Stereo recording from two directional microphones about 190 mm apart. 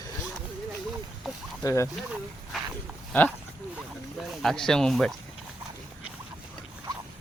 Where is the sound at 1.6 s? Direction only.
15° left (ahead or behind).